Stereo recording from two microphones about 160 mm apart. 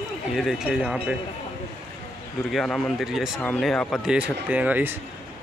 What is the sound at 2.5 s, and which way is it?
Speech, centre (ahead or behind).